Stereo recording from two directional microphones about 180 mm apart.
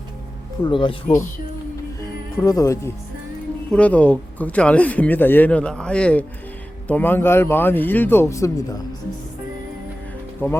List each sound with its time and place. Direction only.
0.6 s speech: 25° left (ahead or behind)
2.4 s speech: 15° left (ahead or behind)
10.4 s speech: 15° left (ahead or behind)